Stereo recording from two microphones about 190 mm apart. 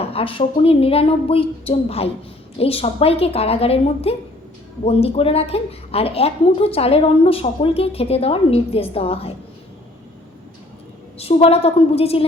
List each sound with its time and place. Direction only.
0.0 s a woman's voice: 30° left (ahead or behind)
11.2 s a woman's voice: 30° left (ahead or behind)